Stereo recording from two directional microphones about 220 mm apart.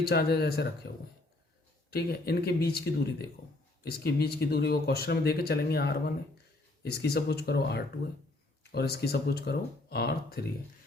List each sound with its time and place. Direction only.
0.1 s speech: 45° left (ahead or behind)
1.9 s speech: 45° left (ahead or behind)